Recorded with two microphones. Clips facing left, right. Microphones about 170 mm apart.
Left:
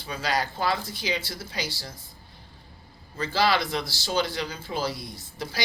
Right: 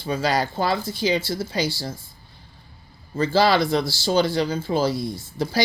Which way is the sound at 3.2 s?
30° right (ahead or behind).